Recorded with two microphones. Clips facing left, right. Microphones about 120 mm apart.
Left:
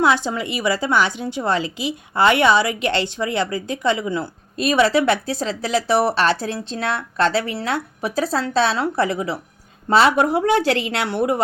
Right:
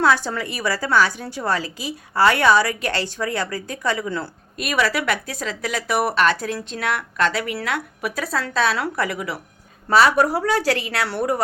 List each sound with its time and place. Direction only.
0.0 s speech: 20° left (ahead or behind)
4.5 s speech: 25° left (ahead or behind)